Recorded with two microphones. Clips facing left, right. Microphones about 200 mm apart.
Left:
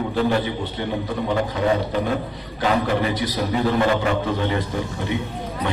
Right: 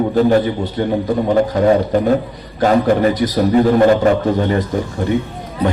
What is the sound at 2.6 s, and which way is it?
A man's voice, 45° right (ahead or behind).